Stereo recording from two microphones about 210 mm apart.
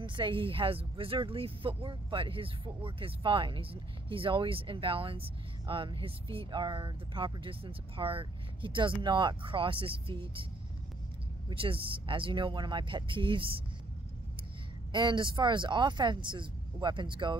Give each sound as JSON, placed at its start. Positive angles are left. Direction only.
{"t": 0.0, "sound": "speech", "side_deg": -25}
{"t": 11.4, "sound": "speech", "side_deg": -25}
{"t": 14.9, "sound": "speech", "side_deg": -20}